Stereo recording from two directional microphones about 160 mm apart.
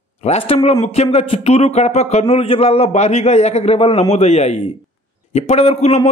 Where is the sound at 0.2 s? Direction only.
40° left (ahead or behind).